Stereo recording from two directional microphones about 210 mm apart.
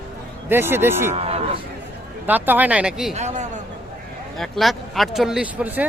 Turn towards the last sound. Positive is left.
turn(degrees=-5)  # may be behind; listen again after turning